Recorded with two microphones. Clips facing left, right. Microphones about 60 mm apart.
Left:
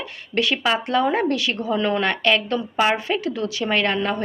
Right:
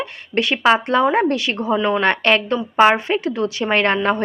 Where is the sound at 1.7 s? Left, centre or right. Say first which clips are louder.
Right 3 dB; centre.